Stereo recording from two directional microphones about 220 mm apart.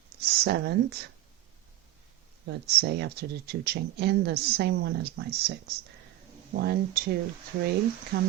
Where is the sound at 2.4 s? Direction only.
45° right (ahead or behind).